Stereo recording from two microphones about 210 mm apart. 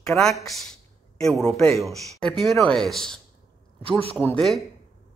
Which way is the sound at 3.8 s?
25° right (ahead or behind).